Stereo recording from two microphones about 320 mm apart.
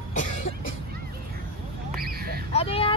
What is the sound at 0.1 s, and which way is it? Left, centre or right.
Cough, left.